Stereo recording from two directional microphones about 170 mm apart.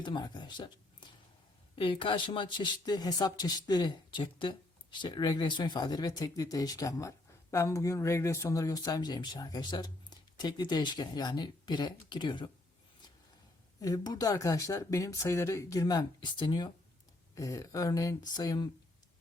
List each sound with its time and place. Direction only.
0.0 s speech: 25° left (ahead or behind)
13.8 s speech: 20° left (ahead or behind)